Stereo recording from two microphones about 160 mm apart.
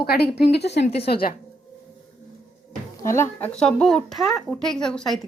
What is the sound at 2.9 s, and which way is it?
Speech, 15° left (ahead or behind).